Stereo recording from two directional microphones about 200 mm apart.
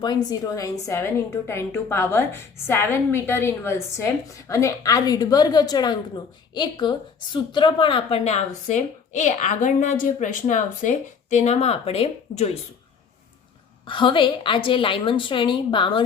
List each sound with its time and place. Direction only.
0.0 s a woman's voice: 20° left (ahead or behind)
13.8 s a woman's voice: 25° left (ahead or behind)